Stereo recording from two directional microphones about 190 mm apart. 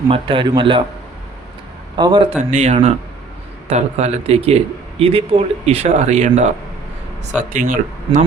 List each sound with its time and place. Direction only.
0.1 s a man's voice: 25° right (ahead or behind)
2.0 s a man's voice: 25° right (ahead or behind)
2.4 s speech: 40° right (ahead or behind)